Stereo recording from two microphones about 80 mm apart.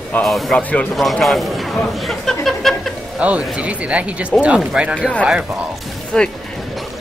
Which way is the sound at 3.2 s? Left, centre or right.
Centre.